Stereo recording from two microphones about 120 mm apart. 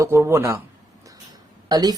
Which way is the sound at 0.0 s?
25° right (ahead or behind).